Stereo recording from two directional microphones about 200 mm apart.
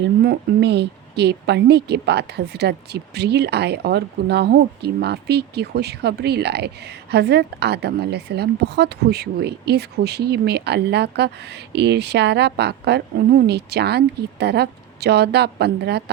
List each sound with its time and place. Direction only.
0.0 s a woman's voice: 55° right (ahead or behind)